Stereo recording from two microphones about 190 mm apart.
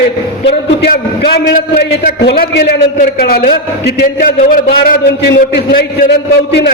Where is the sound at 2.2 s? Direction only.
60° left (ahead or behind).